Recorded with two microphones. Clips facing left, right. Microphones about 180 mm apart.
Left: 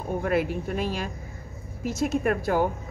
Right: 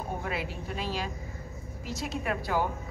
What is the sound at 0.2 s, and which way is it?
A woman's voice, 50° left (ahead or behind).